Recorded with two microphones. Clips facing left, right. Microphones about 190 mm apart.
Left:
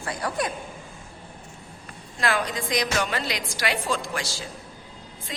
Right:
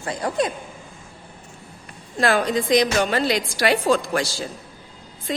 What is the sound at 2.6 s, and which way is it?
A woman's voice, 25° right (ahead or behind).